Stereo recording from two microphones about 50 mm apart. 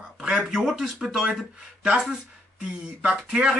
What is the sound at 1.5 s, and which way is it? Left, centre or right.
Speech, centre.